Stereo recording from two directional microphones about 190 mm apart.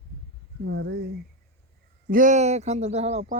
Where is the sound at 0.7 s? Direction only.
60° right (ahead or behind).